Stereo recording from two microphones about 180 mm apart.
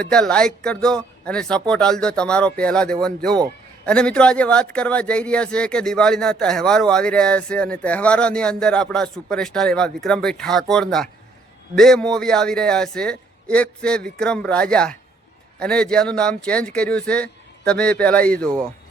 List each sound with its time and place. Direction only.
0.0 s a man's voice: 5° left (ahead or behind)